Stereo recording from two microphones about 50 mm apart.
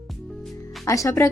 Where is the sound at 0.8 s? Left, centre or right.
Left.